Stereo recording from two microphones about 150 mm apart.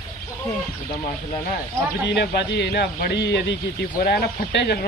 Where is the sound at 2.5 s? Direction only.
90° left.